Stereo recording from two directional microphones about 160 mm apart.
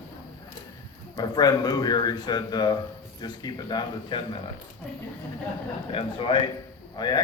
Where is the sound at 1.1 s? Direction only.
25° left (ahead or behind).